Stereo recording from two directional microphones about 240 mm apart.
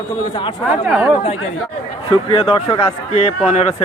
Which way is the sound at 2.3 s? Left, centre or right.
Left.